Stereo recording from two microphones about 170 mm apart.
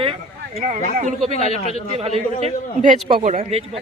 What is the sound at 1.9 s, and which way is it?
A man's voice, 35° right (ahead or behind).